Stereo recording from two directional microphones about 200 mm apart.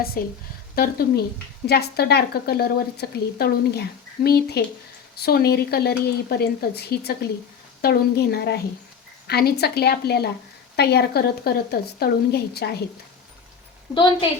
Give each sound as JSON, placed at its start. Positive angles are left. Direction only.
{"t": 0.2, "sound": "a woman's voice", "side_deg": 45}
{"t": 13.9, "sound": "a woman's voice", "side_deg": 25}